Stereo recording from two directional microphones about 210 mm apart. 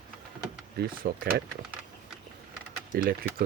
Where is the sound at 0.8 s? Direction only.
45° right (ahead or behind).